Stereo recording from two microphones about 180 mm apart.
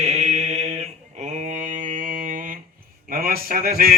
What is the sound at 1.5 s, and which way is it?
Mantra, 45° right (ahead or behind).